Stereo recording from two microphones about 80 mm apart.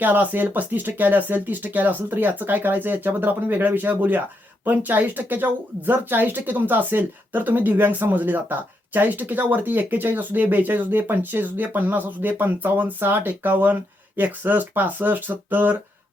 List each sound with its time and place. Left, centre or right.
0.0 s speech: right